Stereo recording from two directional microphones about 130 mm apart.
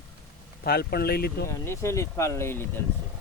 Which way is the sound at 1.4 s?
20° left (ahead or behind).